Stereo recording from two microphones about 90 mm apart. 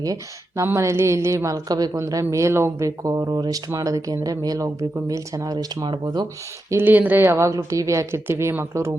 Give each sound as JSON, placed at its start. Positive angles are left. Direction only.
{"t": 0.0, "sound": "speech", "side_deg": -40}
{"t": 6.7, "sound": "speech", "side_deg": -25}